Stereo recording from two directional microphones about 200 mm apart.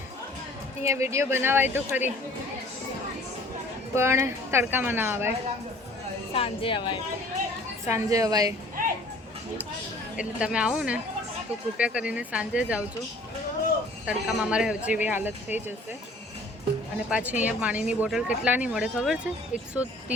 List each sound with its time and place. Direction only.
0.9 s a woman's voice: 15° right (ahead or behind)
3.9 s a woman's voice: 15° right (ahead or behind)
6.3 s speech: 30° left (ahead or behind)
7.9 s a woman's voice: 15° right (ahead or behind)
10.2 s speech: 5° right (ahead or behind)
14.0 s speech: 5° right (ahead or behind)
17.1 s speech: 5° right (ahead or behind)